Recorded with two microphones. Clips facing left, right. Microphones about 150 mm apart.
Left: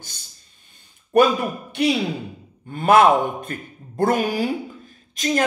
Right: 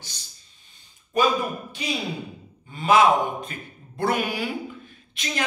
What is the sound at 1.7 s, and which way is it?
Speech, 65° left (ahead or behind).